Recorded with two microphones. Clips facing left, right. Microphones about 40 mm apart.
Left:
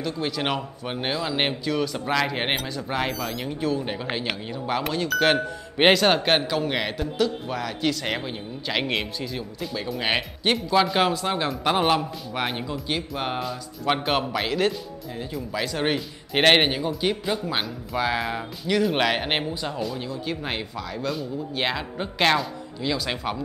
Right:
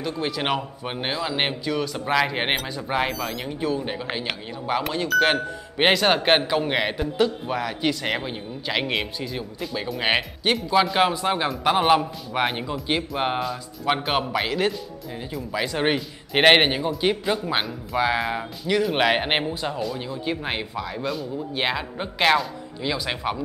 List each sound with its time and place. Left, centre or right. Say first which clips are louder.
0.2 s speech: right 2 dB; centre
6.2 s speech: right 2 dB; centre
13.4 s speech: right 2 dB; centre
19.0 s speech: right 3 dB; centre
21.1 s speech: right 1 dB; centre